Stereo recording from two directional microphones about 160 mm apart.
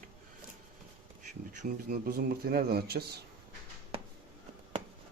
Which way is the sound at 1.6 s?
60° right (ahead or behind).